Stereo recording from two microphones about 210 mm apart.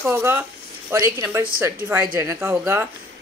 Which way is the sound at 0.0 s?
10° right (ahead or behind).